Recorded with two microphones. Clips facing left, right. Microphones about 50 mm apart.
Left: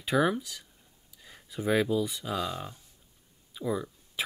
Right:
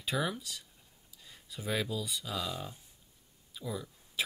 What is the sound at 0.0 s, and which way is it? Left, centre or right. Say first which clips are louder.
Speech: left 8 dB; left.